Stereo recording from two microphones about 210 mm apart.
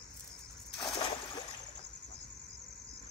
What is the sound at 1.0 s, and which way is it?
Splash, 25° left (ahead or behind).